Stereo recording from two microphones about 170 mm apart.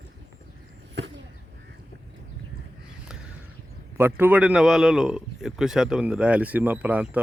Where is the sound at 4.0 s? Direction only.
15° right (ahead or behind).